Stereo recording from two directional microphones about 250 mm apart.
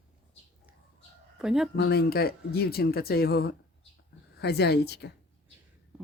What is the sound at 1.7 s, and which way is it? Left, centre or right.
Speech, left.